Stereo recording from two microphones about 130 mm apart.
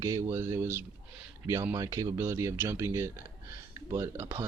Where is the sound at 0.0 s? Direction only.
25° right (ahead or behind).